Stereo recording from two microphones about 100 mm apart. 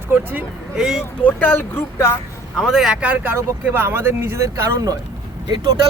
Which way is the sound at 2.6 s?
Centre (ahead or behind).